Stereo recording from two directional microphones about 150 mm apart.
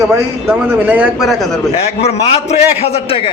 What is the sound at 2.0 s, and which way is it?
A man's voice, 45° left (ahead or behind).